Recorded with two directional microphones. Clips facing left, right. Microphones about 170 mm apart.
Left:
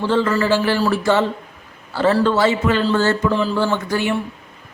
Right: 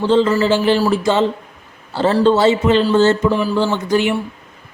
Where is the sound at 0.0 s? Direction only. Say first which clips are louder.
Right 4 dB; 20° right (ahead or behind).